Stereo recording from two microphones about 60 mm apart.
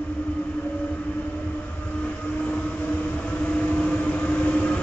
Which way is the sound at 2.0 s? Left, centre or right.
Left.